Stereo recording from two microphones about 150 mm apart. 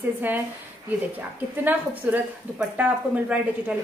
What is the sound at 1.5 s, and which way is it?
A woman's voice, 10° right (ahead or behind).